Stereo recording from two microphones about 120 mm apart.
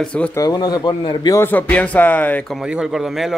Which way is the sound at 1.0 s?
50° left (ahead or behind).